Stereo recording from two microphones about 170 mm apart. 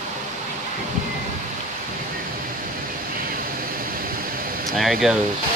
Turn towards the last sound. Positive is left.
turn(degrees=0)  # may be behind; listen again after turning